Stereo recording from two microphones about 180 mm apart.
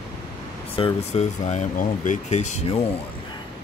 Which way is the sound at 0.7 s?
35° left (ahead or behind).